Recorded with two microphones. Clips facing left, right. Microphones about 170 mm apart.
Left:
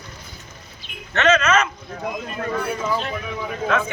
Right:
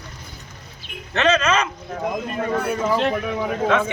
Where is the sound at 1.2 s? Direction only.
30° right (ahead or behind).